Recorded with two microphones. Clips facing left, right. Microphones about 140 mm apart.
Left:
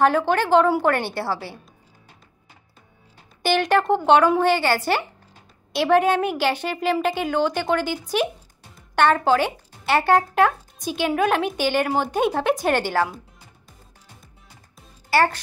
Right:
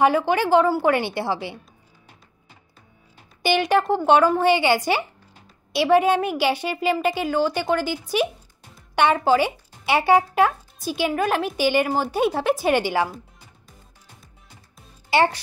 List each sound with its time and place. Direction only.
0.0 s a woman's voice: 10° right (ahead or behind)
3.4 s a woman's voice: 10° right (ahead or behind)
15.0 s speech: 20° right (ahead or behind)